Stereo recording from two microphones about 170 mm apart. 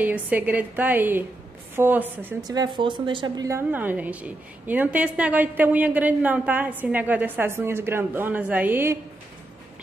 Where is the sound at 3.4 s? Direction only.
15° right (ahead or behind).